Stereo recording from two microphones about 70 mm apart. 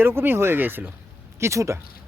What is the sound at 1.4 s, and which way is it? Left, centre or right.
Speech, right.